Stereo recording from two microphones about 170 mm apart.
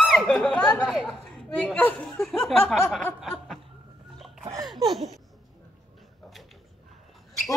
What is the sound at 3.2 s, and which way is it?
Chuckle, centre (ahead or behind).